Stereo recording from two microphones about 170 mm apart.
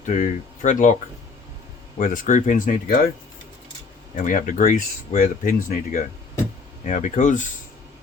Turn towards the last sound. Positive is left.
turn(degrees=45)  # may be behind; listen again after turning